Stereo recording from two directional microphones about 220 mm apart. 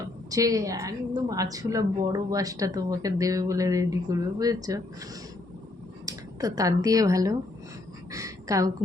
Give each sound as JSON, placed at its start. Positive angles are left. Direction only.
{"t": 0.3, "sound": "a woman's voice", "side_deg": -15}
{"t": 6.1, "sound": "speech", "side_deg": -15}
{"t": 8.1, "sound": "a sound", "side_deg": -15}